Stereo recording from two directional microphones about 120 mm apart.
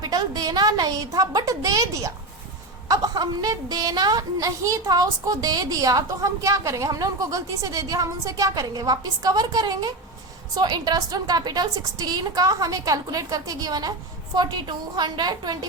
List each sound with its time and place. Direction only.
0.0 s a woman's voice: 35° right (ahead or behind)